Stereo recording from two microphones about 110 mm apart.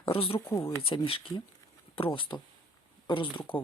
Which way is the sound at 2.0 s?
50° left (ahead or behind).